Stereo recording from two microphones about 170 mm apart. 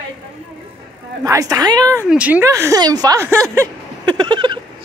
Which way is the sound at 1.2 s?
20° right (ahead or behind).